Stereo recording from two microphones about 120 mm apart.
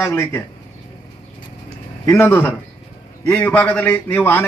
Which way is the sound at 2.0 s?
20° left (ahead or behind).